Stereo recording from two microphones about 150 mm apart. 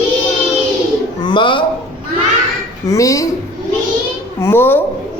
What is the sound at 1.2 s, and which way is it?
Speech, 30° left (ahead or behind).